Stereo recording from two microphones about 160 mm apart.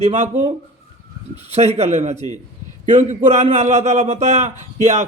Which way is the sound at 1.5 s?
40° right (ahead or behind).